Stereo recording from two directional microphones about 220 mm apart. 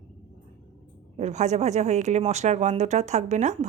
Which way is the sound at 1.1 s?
30° right (ahead or behind).